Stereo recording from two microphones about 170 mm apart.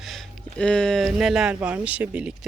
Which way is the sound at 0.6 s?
5° left (ahead or behind).